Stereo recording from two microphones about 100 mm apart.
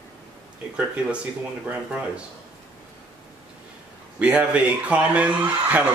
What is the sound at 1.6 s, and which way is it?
Speech, 15° right (ahead or behind).